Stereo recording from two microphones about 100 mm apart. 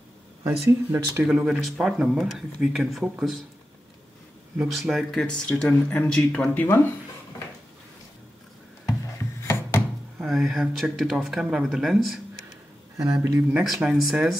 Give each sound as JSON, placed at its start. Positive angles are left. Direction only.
{"t": 0.7, "sound": "speech", "side_deg": -20}
{"t": 1.2, "sound": "speech", "side_deg": -5}
{"t": 4.6, "sound": "speech", "side_deg": 0}
{"t": 8.8, "sound": "music", "side_deg": 30}
{"t": 10.1, "sound": "speech", "side_deg": 0}
{"t": 12.9, "sound": "speech", "side_deg": -35}
{"t": 13.7, "sound": "speech", "side_deg": -5}